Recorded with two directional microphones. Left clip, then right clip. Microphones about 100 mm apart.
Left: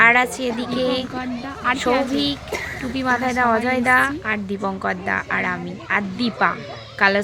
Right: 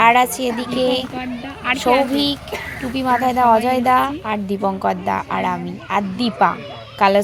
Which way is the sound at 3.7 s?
35° right (ahead or behind).